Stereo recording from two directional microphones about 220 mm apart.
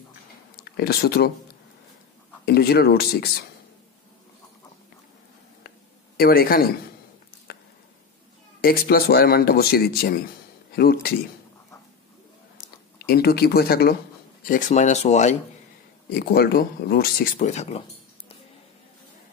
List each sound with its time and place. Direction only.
0.6 s speech: 45° left (ahead or behind)
2.4 s speech: 45° left (ahead or behind)
6.1 s speech: 45° left (ahead or behind)
8.5 s speech: 40° left (ahead or behind)
13.0 s speech: 45° left (ahead or behind)
16.1 s speech: 45° left (ahead or behind)